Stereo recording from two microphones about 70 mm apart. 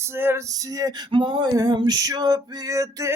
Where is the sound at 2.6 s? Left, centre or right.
Right.